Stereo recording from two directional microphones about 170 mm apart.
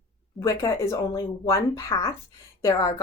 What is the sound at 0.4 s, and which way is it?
A woman's voice, 20° left (ahead or behind).